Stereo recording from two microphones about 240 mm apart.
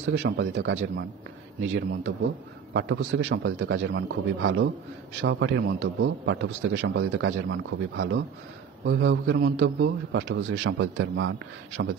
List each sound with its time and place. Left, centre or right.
0.0 s a man's voice: right